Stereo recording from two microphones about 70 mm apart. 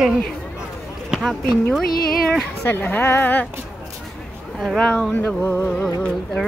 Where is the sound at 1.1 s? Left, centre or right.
Centre.